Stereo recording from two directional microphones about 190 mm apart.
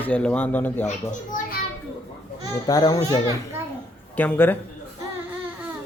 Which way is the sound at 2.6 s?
20° left (ahead or behind).